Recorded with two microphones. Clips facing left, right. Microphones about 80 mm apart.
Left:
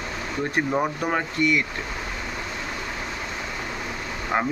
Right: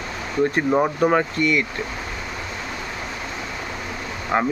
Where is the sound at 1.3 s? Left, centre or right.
Centre.